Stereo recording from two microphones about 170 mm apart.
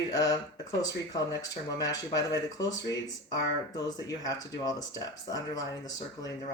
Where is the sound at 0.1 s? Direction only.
20° left (ahead or behind).